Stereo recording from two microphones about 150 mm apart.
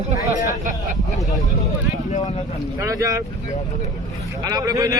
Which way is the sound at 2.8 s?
20° right (ahead or behind).